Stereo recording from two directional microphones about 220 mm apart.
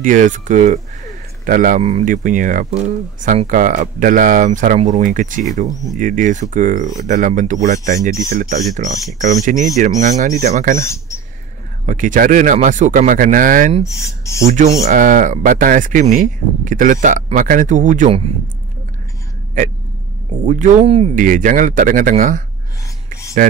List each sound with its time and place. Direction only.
0.0 s speech: 35° right (ahead or behind)
10.8 s speech: 15° left (ahead or behind)
11.8 s speech: 35° right (ahead or behind)
13.8 s speech: 15° left (ahead or behind)
14.9 s speech: 35° right (ahead or behind)
20.4 s speech: 35° right (ahead or behind)